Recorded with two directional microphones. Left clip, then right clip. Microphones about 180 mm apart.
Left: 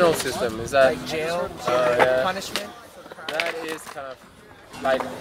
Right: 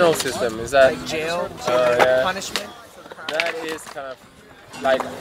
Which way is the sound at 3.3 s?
60° left (ahead or behind).